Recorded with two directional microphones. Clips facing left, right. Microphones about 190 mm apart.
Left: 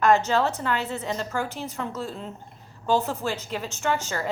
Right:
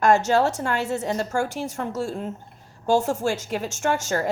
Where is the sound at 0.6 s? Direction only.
45° right (ahead or behind).